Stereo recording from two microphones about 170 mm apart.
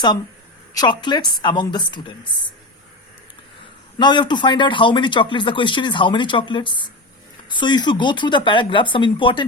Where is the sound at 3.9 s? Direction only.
25° left (ahead or behind).